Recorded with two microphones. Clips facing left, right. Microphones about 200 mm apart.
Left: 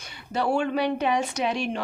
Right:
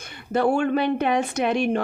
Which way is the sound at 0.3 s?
50° right (ahead or behind).